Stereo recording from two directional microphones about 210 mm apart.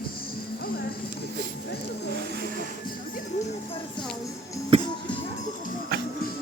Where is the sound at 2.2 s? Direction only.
50° right (ahead or behind).